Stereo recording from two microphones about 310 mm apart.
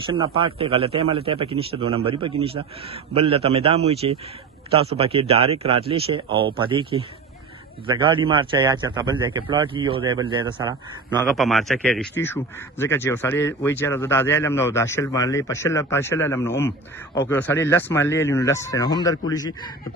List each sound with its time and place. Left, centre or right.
0.0 s a man's voice: centre
11.2 s a man's voice: centre